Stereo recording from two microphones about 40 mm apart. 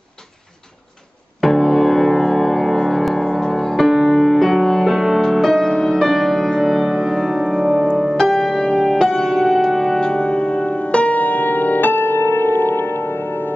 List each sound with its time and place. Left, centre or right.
1.4 s music: centre
9.9 s music: left
11.1 s music: left